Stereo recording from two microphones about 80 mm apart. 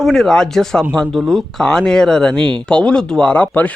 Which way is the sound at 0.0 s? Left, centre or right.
Centre.